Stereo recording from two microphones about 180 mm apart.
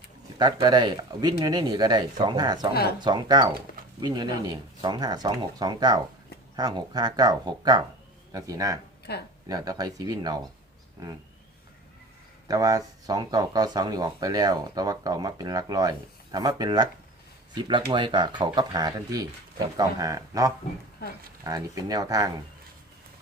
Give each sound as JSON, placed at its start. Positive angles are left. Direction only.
{"t": 0.3, "sound": "speech", "side_deg": -25}
{"t": 9.1, "sound": "speech", "side_deg": 65}
{"t": 9.5, "sound": "speech", "side_deg": -20}
{"t": 12.5, "sound": "speech", "side_deg": -20}